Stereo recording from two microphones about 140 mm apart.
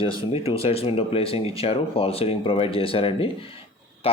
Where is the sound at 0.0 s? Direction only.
40° left (ahead or behind).